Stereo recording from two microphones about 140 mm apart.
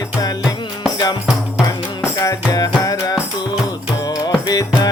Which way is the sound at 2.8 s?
25° left (ahead or behind).